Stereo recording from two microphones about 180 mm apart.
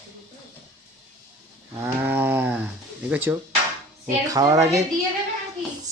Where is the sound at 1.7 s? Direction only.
10° right (ahead or behind).